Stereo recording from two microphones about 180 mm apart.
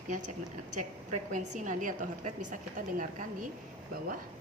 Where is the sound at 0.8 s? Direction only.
45° right (ahead or behind).